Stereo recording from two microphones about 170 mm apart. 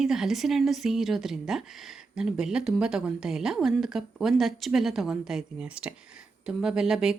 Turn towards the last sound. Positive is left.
turn(degrees=-5)  # may be behind; listen again after turning